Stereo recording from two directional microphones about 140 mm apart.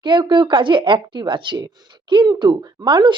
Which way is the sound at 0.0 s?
35° right (ahead or behind).